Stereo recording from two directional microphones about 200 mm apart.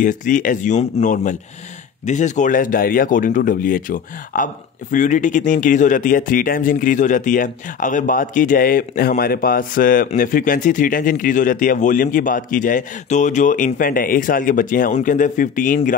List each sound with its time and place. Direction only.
0.0 s speech: 40° left (ahead or behind)